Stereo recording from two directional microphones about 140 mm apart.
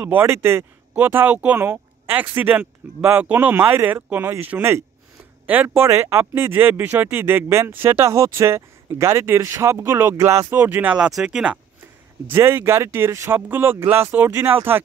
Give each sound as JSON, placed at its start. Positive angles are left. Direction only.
{"t": 0.0, "sound": "speech", "side_deg": -15}